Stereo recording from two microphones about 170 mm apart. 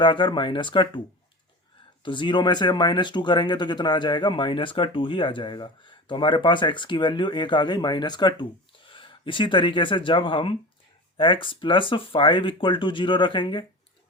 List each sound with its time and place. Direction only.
0.0 s speech: 25° left (ahead or behind)
2.0 s speech: 30° left (ahead or behind)